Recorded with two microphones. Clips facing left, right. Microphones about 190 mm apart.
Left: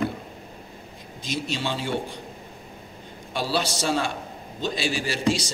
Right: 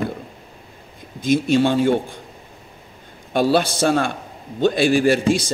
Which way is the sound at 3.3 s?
55° right (ahead or behind).